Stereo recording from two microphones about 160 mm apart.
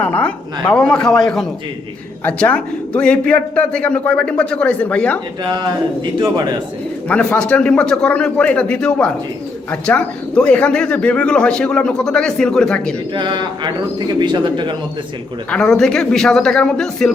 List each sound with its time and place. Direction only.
0.0 s a man's voice: 10° left (ahead or behind)
6.1 s speech: 25° right (ahead or behind)
7.1 s speech: 5° left (ahead or behind)
13.1 s speech: 30° right (ahead or behind)
15.4 s speech: 5° left (ahead or behind)